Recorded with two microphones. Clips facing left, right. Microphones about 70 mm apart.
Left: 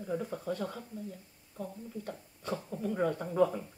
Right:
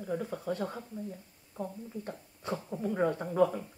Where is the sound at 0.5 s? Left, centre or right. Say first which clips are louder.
Right 2 dB; right.